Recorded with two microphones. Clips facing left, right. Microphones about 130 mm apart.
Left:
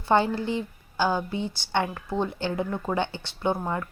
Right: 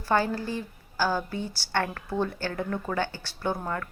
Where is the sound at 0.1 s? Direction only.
25° left (ahead or behind).